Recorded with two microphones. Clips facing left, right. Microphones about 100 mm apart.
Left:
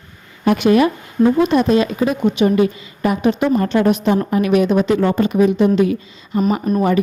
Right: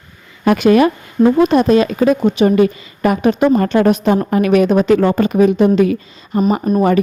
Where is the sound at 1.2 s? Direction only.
45° right (ahead or behind).